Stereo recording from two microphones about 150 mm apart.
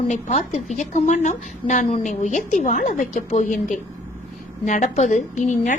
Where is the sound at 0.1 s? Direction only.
50° left (ahead or behind).